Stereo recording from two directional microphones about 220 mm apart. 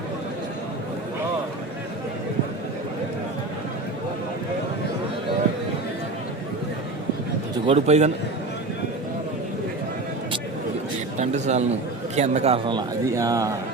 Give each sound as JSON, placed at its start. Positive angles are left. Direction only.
{"t": 7.7, "sound": "a man's voice", "side_deg": -30}
{"t": 11.2, "sound": "a man's voice", "side_deg": -30}